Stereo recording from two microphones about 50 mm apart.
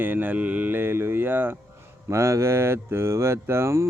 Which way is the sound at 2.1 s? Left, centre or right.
Right.